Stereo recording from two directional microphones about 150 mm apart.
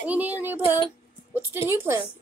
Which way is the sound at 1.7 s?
15° right (ahead or behind).